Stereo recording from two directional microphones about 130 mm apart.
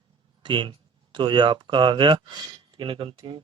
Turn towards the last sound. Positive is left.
turn(degrees=-40)  # may be behind; listen again after turning